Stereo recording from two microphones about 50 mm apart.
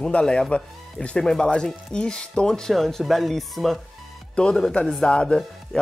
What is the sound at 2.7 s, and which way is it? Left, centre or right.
Speech, centre.